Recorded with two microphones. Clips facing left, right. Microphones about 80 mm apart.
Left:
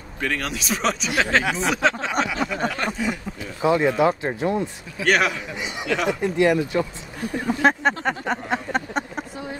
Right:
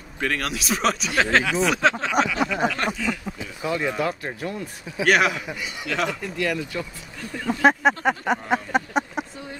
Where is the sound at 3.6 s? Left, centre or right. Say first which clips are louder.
Left 7 dB; left.